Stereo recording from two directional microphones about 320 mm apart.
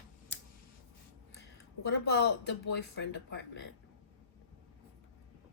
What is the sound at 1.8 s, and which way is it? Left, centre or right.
A woman's voice, left.